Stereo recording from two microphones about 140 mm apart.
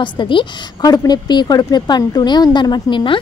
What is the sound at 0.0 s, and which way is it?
A woman's voice, 35° left (ahead or behind).